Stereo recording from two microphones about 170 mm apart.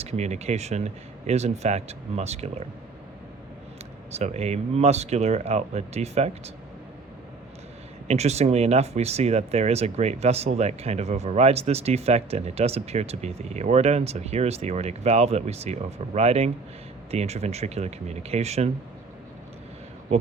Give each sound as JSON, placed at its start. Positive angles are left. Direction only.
{"t": 0.0, "sound": "speech", "side_deg": -40}
{"t": 4.1, "sound": "speech", "side_deg": -40}
{"t": 8.0, "sound": "speech", "side_deg": -40}